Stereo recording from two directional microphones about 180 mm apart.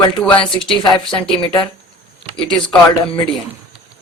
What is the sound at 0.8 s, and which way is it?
Speech, 25° left (ahead or behind).